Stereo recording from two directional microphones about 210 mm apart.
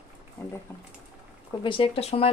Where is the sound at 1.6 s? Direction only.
25° left (ahead or behind).